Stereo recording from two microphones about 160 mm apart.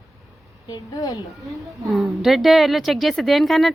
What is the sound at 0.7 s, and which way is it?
Speech, 25° left (ahead or behind).